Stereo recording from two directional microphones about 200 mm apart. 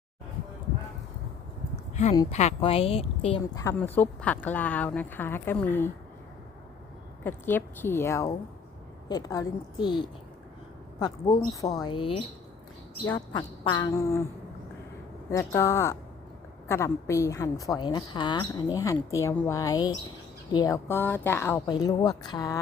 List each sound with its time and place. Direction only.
2.0 s speech: 35° left (ahead or behind)
3.5 s a woman's voice: 15° left (ahead or behind)
7.3 s a woman's voice: 10° left (ahead or behind)
11.5 s speech: 15° left (ahead or behind)
13.1 s speech: 25° left (ahead or behind)
15.3 s a woman's voice: 15° left (ahead or behind)